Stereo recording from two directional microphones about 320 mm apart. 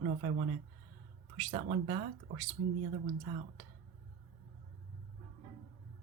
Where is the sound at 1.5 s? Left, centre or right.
Centre.